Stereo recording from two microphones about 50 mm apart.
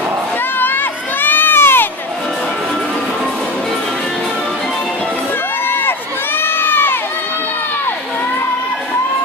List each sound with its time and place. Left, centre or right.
0.6 s crowd: left
5.7 s crowd: left